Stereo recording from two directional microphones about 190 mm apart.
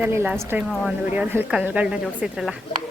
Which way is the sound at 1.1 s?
10° right (ahead or behind).